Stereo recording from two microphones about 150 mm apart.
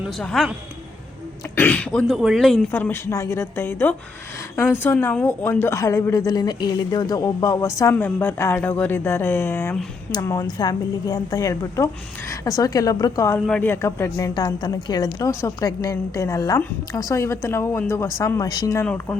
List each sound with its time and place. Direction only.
0.2 s speech: 5° left (ahead or behind)
1.5 s speech: 10° left (ahead or behind)
2.7 s a woman's voice: 15° left (ahead or behind)